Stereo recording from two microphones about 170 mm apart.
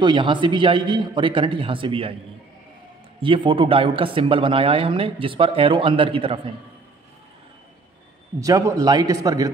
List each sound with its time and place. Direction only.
0.0 s a man's voice: 30° right (ahead or behind)
3.2 s speech: 30° right (ahead or behind)
8.4 s a man's voice: 20° right (ahead or behind)